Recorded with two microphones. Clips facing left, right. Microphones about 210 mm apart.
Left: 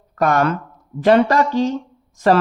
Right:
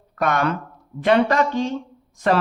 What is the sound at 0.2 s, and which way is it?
A man's voice, 45° left (ahead or behind).